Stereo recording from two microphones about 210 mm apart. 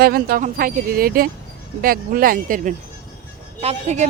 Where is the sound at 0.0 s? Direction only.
45° right (ahead or behind).